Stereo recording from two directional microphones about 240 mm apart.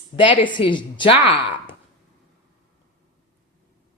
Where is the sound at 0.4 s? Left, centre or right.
Centre.